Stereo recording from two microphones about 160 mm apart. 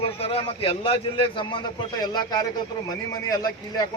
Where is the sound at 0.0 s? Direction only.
35° left (ahead or behind).